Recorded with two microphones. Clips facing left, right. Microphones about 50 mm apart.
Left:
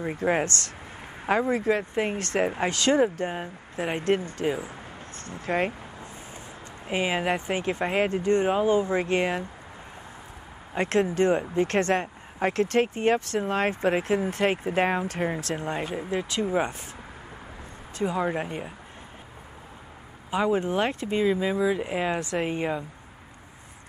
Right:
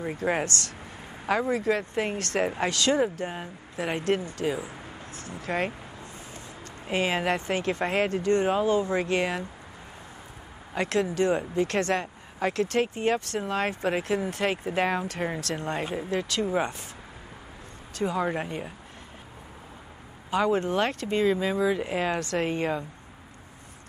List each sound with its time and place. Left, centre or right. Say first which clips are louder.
0.2 s speech: left 3 dB; left
5.1 s speech: left 3 dB; left
6.9 s speech: even; centre
10.7 s speech: left 2 dB; left
15.2 s speech: left 2 dB; centre
16.1 s speech: even; left
16.4 s speech: left 3 dB; centre
18.2 s speech: left 1 dB; centre
20.2 s speech: even; centre